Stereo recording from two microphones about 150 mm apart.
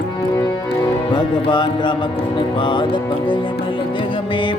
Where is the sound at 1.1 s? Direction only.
30° left (ahead or behind).